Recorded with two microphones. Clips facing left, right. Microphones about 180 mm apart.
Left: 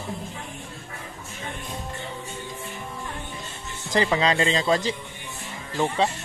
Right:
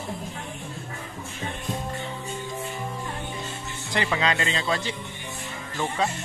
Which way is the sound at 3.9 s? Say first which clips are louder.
Left 4 dB; 35° left (ahead or behind).